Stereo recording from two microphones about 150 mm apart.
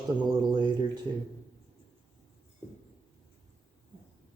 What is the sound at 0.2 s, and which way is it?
Speech, 30° right (ahead or behind).